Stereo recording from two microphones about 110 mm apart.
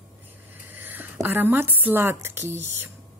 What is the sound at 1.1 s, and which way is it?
Speech, 20° right (ahead or behind).